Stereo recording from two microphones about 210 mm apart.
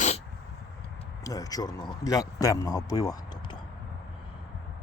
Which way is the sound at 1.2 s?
15° left (ahead or behind).